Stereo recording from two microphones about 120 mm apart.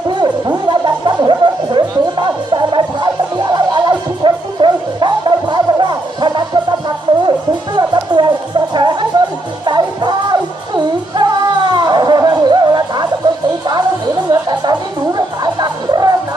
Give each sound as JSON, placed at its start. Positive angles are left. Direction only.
{"t": 0.2, "sound": "music", "side_deg": -35}
{"t": 11.7, "sound": "music", "side_deg": -35}